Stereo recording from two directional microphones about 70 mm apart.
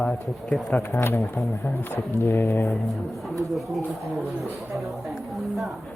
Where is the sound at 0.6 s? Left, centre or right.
Left.